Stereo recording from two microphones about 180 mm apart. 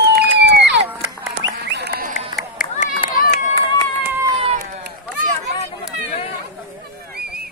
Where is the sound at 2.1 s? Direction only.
45° left (ahead or behind).